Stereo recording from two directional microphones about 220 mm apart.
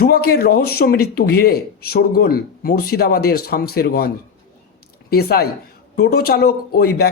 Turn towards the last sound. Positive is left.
turn(degrees=45)  # may be behind; listen again after turning